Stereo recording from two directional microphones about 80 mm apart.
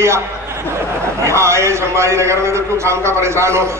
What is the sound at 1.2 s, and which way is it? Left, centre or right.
A man's voice, right.